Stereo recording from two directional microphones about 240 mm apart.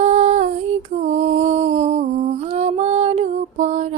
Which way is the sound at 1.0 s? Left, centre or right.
Right.